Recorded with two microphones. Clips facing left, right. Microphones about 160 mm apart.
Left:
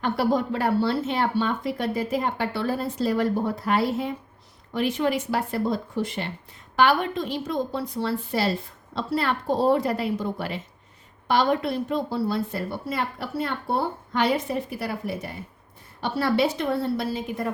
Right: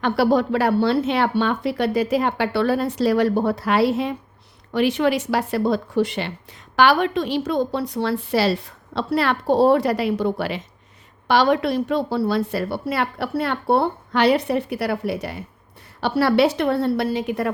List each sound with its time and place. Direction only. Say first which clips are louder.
0.0 s speech: right 5 dB; 75° right (ahead or behind)